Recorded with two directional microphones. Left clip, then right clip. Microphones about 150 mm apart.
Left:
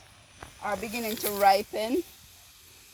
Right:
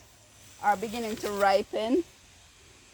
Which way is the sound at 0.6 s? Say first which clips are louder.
Right 5 dB; 30° right (ahead or behind).